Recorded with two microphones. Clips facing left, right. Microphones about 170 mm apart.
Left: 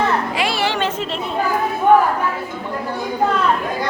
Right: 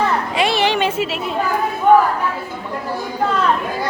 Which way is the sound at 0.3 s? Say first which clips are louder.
Right 3 dB; 20° right (ahead or behind).